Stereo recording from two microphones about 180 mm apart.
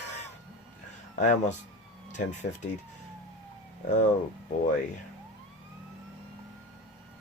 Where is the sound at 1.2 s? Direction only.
40° left (ahead or behind).